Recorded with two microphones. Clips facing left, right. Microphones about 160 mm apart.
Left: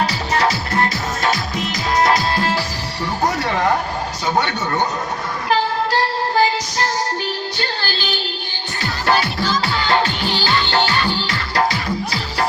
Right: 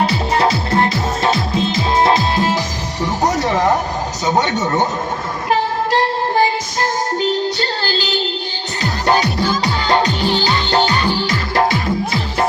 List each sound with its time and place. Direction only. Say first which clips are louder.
0.0 s music: right 3 dB; 25° right (ahead or behind)
3.4 s a sound: right 3 dB; 20° right (ahead or behind)
4.3 s speech: right 3 dB; 20° right (ahead or behind)
5.5 s music: right 2 dB; 20° right (ahead or behind)
9.0 s music: right 3 dB; 20° right (ahead or behind)
10.6 s music: right 3 dB; 40° right (ahead or behind)
10.8 s music: right 3 dB; 20° right (ahead or behind)